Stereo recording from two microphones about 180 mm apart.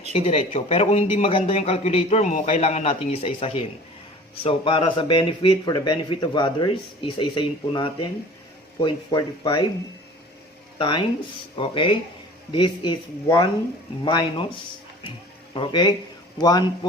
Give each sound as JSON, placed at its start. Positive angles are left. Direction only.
{"t": 0.1, "sound": "a man's voice", "side_deg": 35}
{"t": 10.8, "sound": "speech", "side_deg": 25}
{"t": 15.5, "sound": "speech", "side_deg": 25}